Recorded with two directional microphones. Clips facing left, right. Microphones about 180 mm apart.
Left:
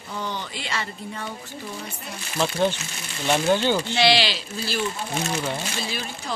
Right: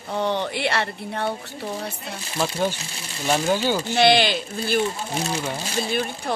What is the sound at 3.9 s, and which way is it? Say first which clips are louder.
Speech: right 3 dB; 50° right (ahead or behind).